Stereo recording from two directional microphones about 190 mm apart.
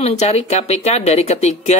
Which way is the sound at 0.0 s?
35° left (ahead or behind).